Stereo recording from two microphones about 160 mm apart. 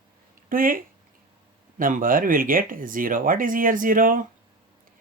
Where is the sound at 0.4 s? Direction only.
60° right (ahead or behind).